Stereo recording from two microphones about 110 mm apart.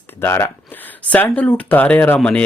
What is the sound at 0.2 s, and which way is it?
Speech, 20° left (ahead or behind).